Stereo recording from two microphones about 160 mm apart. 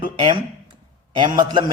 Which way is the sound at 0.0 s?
35° right (ahead or behind).